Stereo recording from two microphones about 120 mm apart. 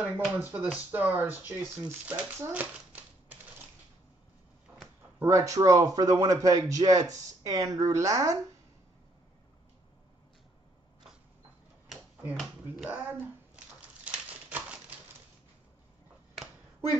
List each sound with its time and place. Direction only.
0.0 s speech: 15° right (ahead or behind)
5.2 s speech: 25° right (ahead or behind)
12.4 s speech: 5° right (ahead or behind)
12.9 s speech: 15° right (ahead or behind)
14.0 s a sound: 10° right (ahead or behind)